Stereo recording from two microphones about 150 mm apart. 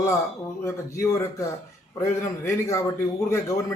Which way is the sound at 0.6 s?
20° left (ahead or behind).